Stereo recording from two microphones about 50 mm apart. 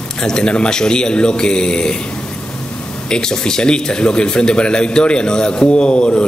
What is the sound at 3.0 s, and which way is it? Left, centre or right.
Speech, centre.